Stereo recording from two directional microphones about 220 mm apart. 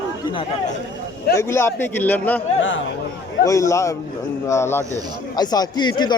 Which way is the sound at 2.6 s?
60° left (ahead or behind).